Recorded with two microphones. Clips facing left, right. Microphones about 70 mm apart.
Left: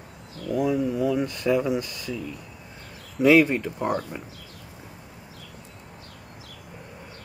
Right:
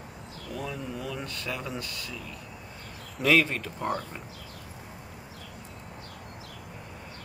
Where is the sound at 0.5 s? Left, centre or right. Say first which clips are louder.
Left 12 dB; centre.